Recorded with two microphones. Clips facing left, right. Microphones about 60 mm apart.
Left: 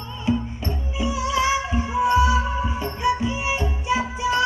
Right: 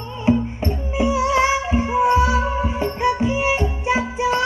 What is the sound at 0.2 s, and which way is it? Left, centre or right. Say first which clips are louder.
Music: right 6 dB; right.